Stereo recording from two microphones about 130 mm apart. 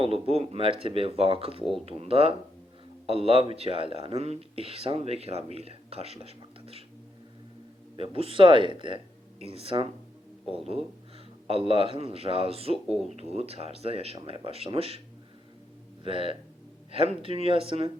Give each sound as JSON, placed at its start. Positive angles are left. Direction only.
{"t": 0.0, "sound": "speech", "side_deg": -50}
{"t": 7.9, "sound": "speech", "side_deg": -45}
{"t": 11.4, "sound": "speech", "side_deg": -45}
{"t": 16.0, "sound": "speech", "side_deg": -45}